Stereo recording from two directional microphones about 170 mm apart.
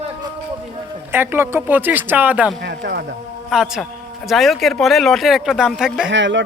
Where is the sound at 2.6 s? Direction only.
85° right.